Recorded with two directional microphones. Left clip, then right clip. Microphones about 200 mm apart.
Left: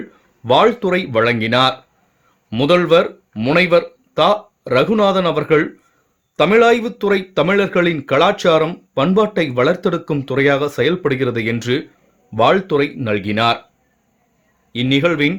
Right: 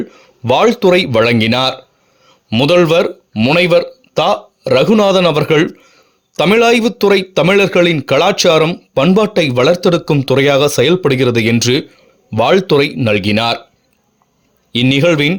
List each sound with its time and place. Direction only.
0.1 s speech: 35° right (ahead or behind)
14.7 s speech: 40° right (ahead or behind)